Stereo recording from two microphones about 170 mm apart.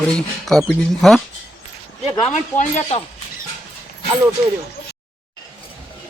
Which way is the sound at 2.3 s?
45° left (ahead or behind).